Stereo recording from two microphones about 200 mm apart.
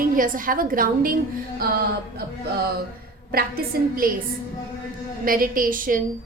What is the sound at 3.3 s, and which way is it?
Speech, 50° right (ahead or behind).